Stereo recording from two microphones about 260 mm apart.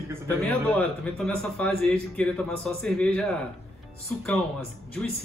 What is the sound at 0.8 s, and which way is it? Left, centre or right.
Speech, centre.